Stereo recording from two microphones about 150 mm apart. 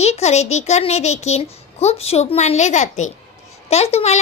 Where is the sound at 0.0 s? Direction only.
45° left (ahead or behind).